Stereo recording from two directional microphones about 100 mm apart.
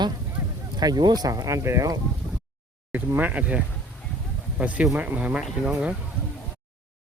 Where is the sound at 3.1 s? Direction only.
15° right (ahead or behind).